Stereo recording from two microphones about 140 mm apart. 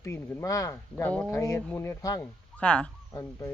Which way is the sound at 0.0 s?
20° left (ahead or behind).